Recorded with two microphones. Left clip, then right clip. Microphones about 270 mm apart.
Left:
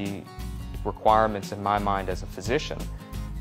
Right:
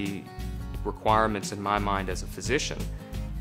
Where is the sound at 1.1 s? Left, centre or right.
Left.